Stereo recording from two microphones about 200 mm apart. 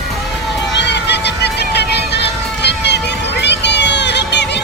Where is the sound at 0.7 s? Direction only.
60° left (ahead or behind).